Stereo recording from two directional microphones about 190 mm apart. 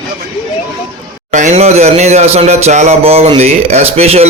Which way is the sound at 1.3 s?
35° right (ahead or behind).